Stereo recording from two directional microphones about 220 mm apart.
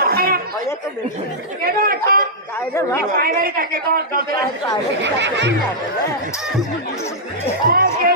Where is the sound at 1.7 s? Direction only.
40° right (ahead or behind).